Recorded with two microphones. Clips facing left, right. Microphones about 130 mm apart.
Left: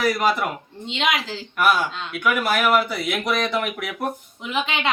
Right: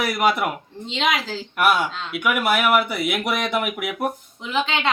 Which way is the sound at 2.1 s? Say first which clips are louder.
Right 1 dB; 15° right (ahead or behind).